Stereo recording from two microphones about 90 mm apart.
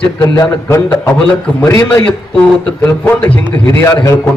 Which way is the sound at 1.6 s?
25° left (ahead or behind).